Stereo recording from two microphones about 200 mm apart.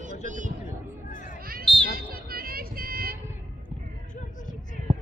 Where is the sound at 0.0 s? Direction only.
40° right (ahead or behind).